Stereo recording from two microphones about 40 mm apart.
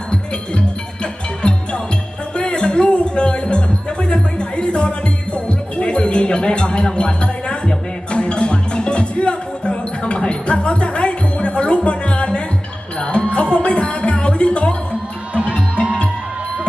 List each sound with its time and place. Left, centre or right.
1.4 s music: left